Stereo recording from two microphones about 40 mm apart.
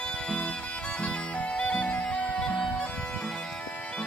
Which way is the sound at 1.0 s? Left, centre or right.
Left.